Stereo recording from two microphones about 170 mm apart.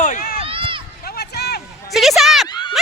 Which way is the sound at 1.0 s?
70° left (ahead or behind).